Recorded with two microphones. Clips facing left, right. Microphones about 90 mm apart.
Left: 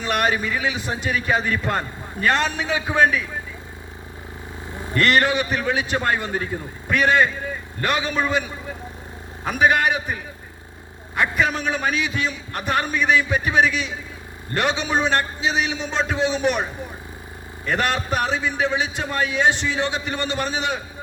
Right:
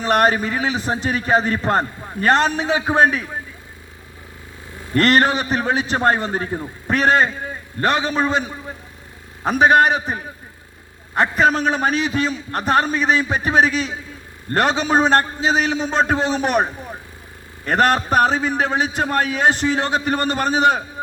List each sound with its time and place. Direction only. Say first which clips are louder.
0.0 s a man's voice: right 5 dB; 40° right (ahead or behind)
4.9 s a man's voice: right 3 dB; 40° right (ahead or behind)
17.7 s a man's voice: right 6 dB; 45° right (ahead or behind)